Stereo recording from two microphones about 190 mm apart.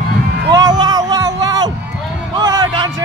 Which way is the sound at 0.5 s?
20° right (ahead or behind).